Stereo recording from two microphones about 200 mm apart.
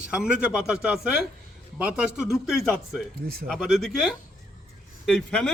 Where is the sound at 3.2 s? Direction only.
50° right (ahead or behind).